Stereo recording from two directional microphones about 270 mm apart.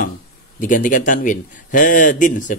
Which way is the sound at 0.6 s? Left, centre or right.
Left.